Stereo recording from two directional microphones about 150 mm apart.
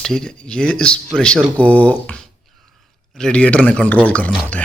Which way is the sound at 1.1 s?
5° left (ahead or behind).